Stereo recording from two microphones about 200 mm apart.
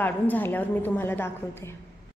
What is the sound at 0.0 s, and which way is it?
A woman's voice, 10° left (ahead or behind).